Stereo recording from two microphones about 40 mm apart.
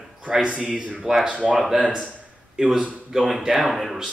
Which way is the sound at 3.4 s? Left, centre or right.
Centre.